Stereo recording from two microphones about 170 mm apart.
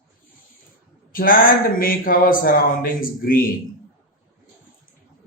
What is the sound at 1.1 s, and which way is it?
Speech, 55° left (ahead or behind).